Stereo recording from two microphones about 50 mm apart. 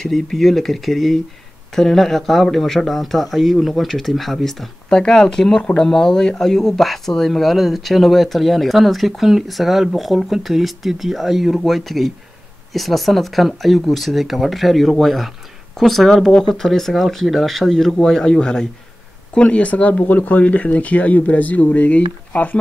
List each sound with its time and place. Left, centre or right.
0.0 s speech: centre
4.8 s speech: centre